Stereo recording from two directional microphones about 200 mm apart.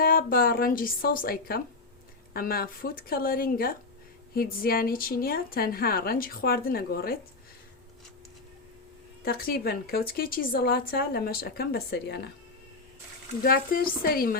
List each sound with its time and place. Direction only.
0.0 s a woman's voice: 45° left (ahead or behind)
9.2 s a woman's voice: 50° left (ahead or behind)
13.4 s a woman's voice: 45° left (ahead or behind)